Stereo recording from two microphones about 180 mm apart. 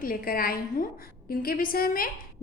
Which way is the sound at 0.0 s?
50° left (ahead or behind).